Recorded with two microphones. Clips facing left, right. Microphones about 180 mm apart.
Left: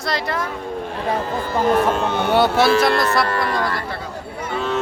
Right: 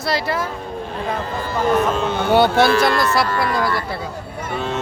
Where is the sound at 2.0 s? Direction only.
60° left (ahead or behind).